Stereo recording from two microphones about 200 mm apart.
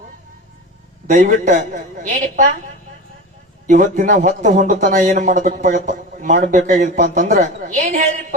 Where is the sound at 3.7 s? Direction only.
40° right (ahead or behind).